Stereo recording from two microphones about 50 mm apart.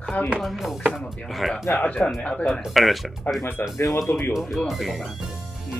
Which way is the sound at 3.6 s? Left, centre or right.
Left.